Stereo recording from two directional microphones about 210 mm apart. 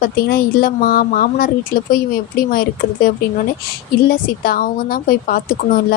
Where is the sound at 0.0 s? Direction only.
45° left (ahead or behind).